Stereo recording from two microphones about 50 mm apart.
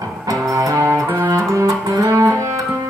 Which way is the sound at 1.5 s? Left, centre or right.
Right.